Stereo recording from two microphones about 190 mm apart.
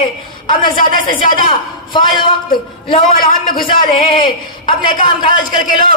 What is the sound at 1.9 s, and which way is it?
Speech, 25° left (ahead or behind).